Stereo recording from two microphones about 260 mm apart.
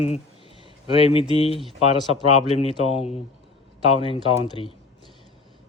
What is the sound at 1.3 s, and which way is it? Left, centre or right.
Speech, left.